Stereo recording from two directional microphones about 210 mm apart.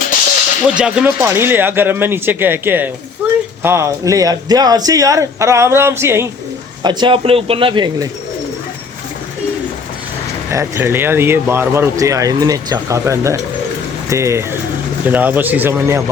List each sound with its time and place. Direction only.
0.6 s speech: 5° right (ahead or behind)
6.8 s speech: 25° right (ahead or behind)
10.5 s speech: 10° right (ahead or behind)